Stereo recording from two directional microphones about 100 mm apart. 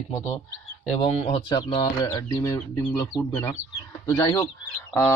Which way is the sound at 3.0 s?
25° left (ahead or behind).